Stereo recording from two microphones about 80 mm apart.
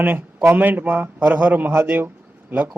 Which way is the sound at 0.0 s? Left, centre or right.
Centre.